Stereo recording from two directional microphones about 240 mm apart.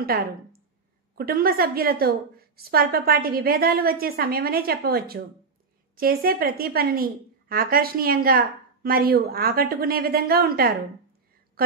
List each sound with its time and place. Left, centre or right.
0.0 s a woman's voice: right